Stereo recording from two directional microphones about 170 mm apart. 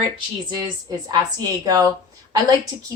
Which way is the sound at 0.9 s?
20° right (ahead or behind).